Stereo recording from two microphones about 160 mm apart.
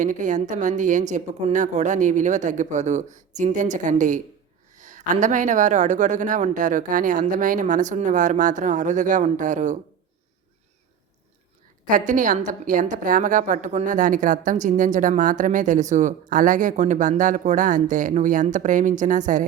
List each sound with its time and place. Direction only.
0.0 s a woman's voice: 50° right (ahead or behind)
11.9 s a woman's voice: 55° right (ahead or behind)